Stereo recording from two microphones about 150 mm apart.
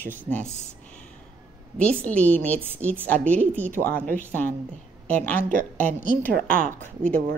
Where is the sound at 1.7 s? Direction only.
10° left (ahead or behind).